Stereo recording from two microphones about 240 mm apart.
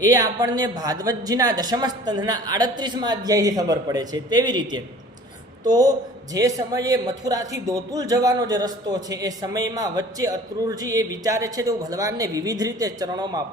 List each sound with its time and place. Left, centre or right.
0.0 s speech: centre